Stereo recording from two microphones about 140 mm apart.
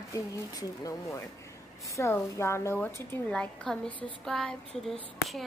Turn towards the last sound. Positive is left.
turn(degrees=0)  # may be behind; listen again after turning